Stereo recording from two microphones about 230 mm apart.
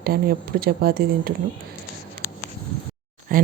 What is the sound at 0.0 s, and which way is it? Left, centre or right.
Speech, right.